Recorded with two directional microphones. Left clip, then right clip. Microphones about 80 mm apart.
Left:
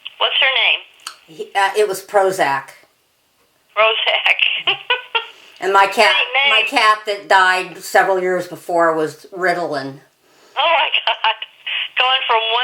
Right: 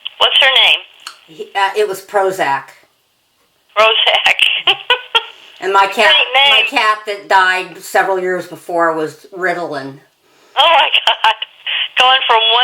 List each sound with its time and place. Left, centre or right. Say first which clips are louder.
0.0 s telephone: right 5 dB; right
1.0 s a woman's voice: right 1 dB; centre
3.8 s a sound: right 4 dB; right
6.0 s speech: right 4 dB; right
6.7 s a woman's voice: even; centre
10.5 s telephone: right 5 dB; right